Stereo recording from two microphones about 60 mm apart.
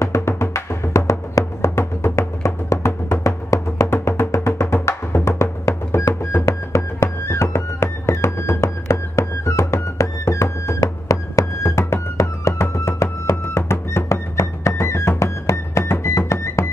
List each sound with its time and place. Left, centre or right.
0.0 s music: left
3.8 s music: left
5.2 s music: left